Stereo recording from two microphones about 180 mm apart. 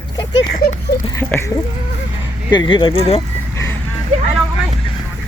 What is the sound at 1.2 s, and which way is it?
Speech, 10° left (ahead or behind).